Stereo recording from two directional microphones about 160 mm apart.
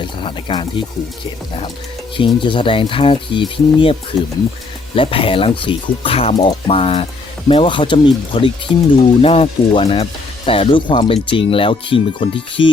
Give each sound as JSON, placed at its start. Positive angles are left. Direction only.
{"t": 0.0, "sound": "speech", "side_deg": 30}
{"t": 2.1, "sound": "speech", "side_deg": 30}
{"t": 4.9, "sound": "speech", "side_deg": 35}